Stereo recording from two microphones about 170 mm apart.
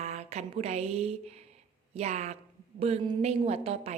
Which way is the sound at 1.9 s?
40° right (ahead or behind).